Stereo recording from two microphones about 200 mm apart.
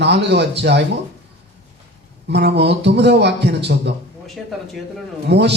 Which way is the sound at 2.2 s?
55° right (ahead or behind).